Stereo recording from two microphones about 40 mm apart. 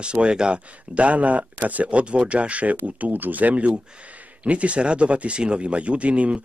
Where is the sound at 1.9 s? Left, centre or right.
Right.